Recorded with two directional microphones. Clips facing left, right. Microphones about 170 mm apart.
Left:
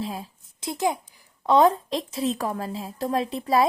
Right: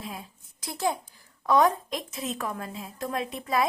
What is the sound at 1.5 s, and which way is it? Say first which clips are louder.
A woman's voice: left 4 dB; 30° left (ahead or behind).